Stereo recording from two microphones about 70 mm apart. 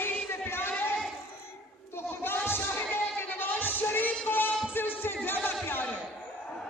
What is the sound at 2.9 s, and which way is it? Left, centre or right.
Music, left.